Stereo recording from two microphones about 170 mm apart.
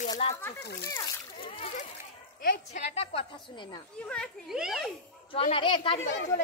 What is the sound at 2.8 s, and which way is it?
A woman's voice, 35° left (ahead or behind).